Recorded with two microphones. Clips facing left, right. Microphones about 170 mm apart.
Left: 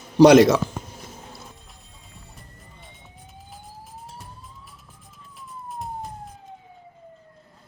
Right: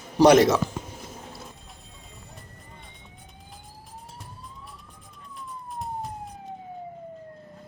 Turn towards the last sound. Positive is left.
turn(degrees=0)  # may be behind; listen again after turning